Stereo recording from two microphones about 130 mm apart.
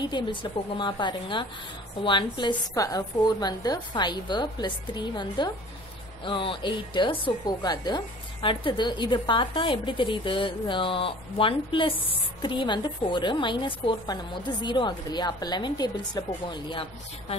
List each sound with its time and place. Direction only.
0.0 s a woman's voice: 35° left (ahead or behind)